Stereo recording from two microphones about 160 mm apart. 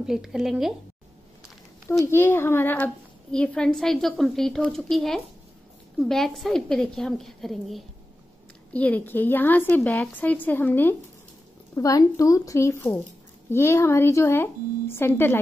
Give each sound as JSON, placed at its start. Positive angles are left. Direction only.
{"t": 0.0, "sound": "a child's voice", "side_deg": -5}
{"t": 1.9, "sound": "a child's voice", "side_deg": 15}